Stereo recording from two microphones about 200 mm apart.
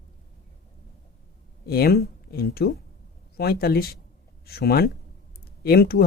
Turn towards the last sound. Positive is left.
turn(degrees=50)  # may be behind; listen again after turning